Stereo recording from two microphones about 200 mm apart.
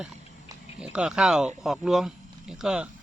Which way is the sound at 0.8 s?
5° right (ahead or behind).